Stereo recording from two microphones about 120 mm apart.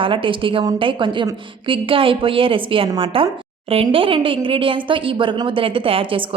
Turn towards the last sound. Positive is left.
turn(degrees=-50)  # may be behind; listen again after turning